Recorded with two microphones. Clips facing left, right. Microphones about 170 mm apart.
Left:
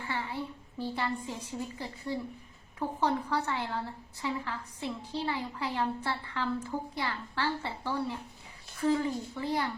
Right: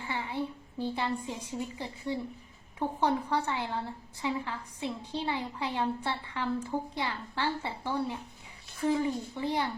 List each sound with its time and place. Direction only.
0.1 s a woman's voice: 20° right (ahead or behind)